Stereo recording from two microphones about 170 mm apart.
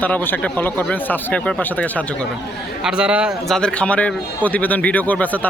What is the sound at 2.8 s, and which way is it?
Speech, 5° right (ahead or behind).